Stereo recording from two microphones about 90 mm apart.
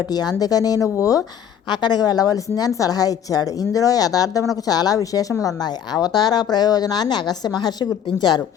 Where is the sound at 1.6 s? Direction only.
55° left (ahead or behind).